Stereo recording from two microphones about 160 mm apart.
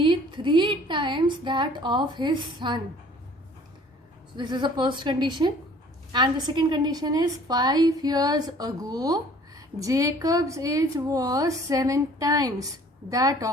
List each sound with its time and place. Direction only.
0.0 s a woman's voice: 30° right (ahead or behind)
4.4 s a woman's voice: 30° right (ahead or behind)